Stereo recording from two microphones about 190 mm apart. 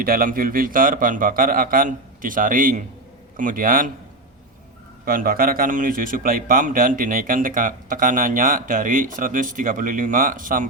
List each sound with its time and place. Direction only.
0.0 s a man's voice: 50° right (ahead or behind)
5.0 s a man's voice: 50° right (ahead or behind)